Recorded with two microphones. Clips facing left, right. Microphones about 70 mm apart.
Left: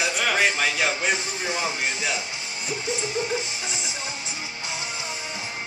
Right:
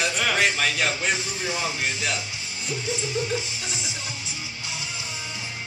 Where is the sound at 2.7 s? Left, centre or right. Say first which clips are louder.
Even; left.